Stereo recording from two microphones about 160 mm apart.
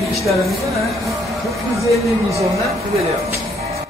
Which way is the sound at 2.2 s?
20° right (ahead or behind).